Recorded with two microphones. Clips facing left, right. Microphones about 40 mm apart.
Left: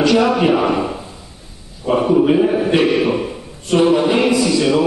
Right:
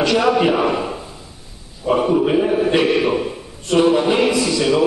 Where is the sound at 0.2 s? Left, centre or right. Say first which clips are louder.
Left 1 dB; centre.